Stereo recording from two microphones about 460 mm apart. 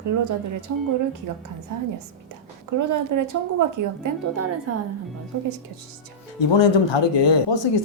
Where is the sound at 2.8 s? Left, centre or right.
Right.